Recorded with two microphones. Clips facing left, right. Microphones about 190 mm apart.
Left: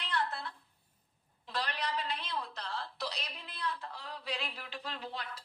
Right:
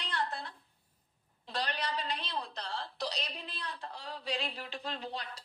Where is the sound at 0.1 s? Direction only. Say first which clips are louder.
Left 1 dB; 35° right (ahead or behind).